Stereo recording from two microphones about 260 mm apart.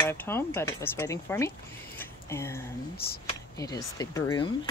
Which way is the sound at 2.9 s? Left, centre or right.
Left.